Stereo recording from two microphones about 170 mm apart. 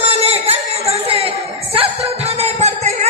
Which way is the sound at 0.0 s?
35° right (ahead or behind).